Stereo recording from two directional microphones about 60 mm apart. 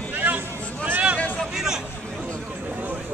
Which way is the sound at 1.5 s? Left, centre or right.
Centre.